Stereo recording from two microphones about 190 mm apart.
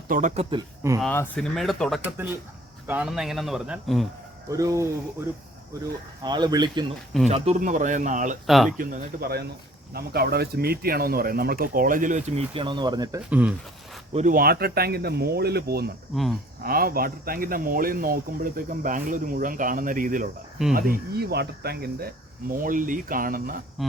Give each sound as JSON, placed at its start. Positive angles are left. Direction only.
{"t": 0.1, "sound": "speech", "side_deg": -45}
{"t": 0.5, "sound": "speech", "side_deg": -15}
{"t": 1.0, "sound": "speech", "side_deg": 5}
{"t": 4.4, "sound": "speech", "side_deg": -15}
{"t": 6.2, "sound": "speech", "side_deg": -20}
{"t": 7.3, "sound": "speech", "side_deg": -35}
{"t": 8.4, "sound": "speech", "side_deg": 0}
{"t": 8.8, "sound": "speech", "side_deg": -50}
{"t": 12.5, "sound": "speech", "side_deg": -25}
{"t": 13.3, "sound": "speech", "side_deg": -10}
{"t": 14.1, "sound": "speech", "side_deg": -40}
{"t": 16.1, "sound": "speech", "side_deg": 0}
{"t": 16.6, "sound": "speech", "side_deg": -50}